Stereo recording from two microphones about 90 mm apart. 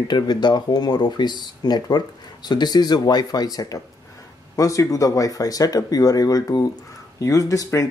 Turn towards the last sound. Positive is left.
turn(degrees=40)  # may be behind; listen again after turning